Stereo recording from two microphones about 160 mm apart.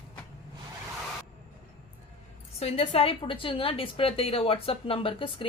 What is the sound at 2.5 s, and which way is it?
A woman's voice, 40° left (ahead or behind).